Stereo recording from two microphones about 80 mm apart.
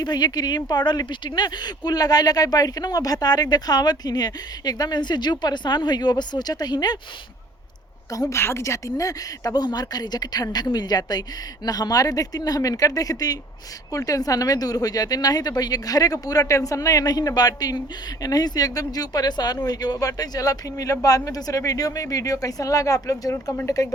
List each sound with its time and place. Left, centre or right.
0.0 s speech: left
8.1 s speech: left
8.4 s speech: left